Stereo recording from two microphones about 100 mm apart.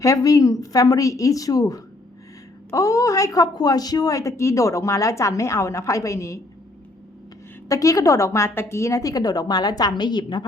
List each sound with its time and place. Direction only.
0.0 s a woman's voice: 35° left (ahead or behind)
7.7 s a woman's voice: 35° left (ahead or behind)